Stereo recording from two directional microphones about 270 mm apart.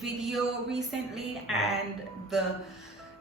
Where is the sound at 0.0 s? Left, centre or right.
Centre.